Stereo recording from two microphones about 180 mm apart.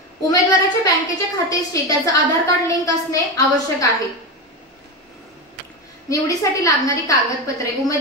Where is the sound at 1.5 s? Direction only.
20° left (ahead or behind).